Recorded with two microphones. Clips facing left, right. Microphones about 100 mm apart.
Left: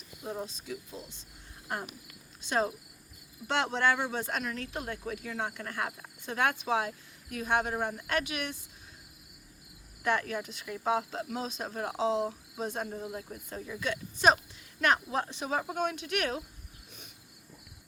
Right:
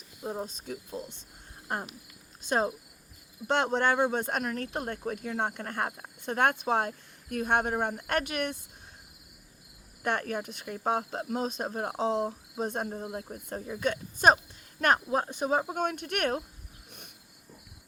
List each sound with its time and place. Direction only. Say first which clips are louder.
0.2 s cricket: right 3 dB; 25° right (ahead or behind)
0.4 s speech: right 1 dB; 50° right (ahead or behind)
1.6 s cricket: right 2 dB; 30° right (ahead or behind)
3.4 s speech: right 2 dB; 45° right (ahead or behind)
10.0 s speech: even; 50° right (ahead or behind)
11.7 s speech: right 2 dB; 35° right (ahead or behind)
11.9 s speech: even; 50° right (ahead or behind)
13.1 s speech: right 3 dB; 35° right (ahead or behind)
15.4 s speech: right 8 dB; 25° right (ahead or behind)
15.7 s speech: right 1 dB; 45° right (ahead or behind)